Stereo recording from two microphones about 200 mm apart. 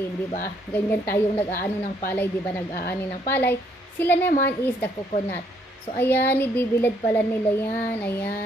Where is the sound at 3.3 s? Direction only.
10° left (ahead or behind).